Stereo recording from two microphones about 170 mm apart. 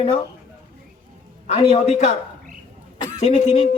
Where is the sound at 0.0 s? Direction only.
35° left (ahead or behind).